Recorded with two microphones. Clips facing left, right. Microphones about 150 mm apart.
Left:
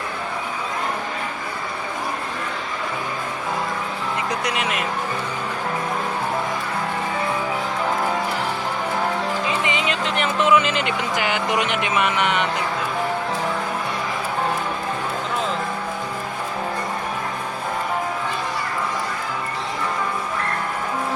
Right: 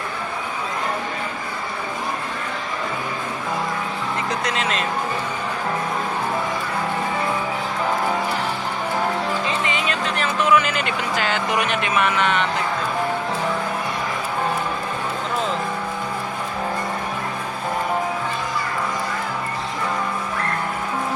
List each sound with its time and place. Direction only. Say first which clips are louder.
4.3 s speech: right 1 dB; 15° left (ahead or behind)
9.6 s music: left 1 dB; 20° left (ahead or behind)